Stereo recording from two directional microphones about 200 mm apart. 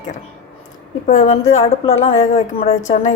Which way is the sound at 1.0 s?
35° left (ahead or behind).